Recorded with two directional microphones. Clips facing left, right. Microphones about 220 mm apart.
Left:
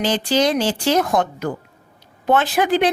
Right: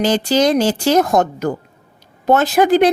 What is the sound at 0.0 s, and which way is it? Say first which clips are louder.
A woman's voice: right 4 dB; 45° right (ahead or behind).